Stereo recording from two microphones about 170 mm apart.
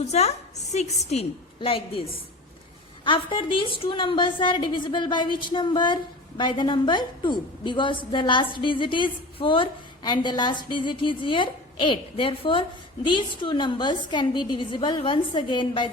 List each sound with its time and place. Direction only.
0.0 s a woman's voice: 40° left (ahead or behind)